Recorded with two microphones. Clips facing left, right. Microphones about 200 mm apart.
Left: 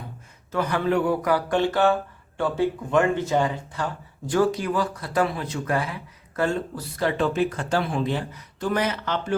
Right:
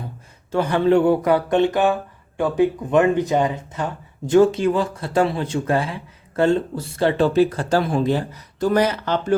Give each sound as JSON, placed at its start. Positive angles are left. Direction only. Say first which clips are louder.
{"t": 0.5, "sound": "speech", "louder": "right 6 dB", "side_deg": -30}